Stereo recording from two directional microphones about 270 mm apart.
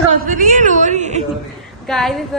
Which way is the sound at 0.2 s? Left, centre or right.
Right.